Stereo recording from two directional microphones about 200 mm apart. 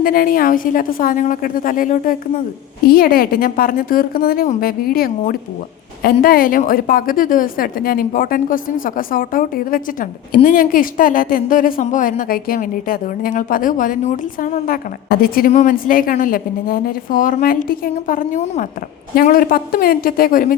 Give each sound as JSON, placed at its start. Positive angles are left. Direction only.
{"t": 0.0, "sound": "a woman's voice", "side_deg": 45}